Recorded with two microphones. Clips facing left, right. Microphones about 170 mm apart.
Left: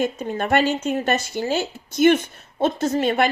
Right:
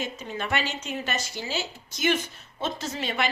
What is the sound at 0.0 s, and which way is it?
A woman's voice, 50° left (ahead or behind).